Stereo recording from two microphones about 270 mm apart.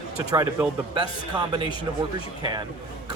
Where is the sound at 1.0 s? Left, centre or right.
Centre.